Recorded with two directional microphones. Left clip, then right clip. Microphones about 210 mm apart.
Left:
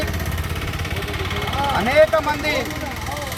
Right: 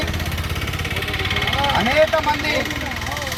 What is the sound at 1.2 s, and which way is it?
Vehicle, 45° left (ahead or behind).